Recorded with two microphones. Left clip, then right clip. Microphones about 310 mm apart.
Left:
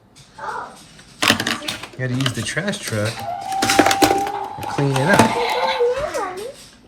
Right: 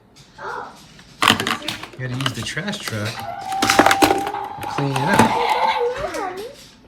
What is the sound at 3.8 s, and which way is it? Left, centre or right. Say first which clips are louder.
Chopping: even; centre.